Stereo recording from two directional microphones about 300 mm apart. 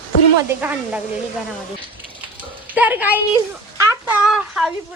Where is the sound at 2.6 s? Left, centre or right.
Centre.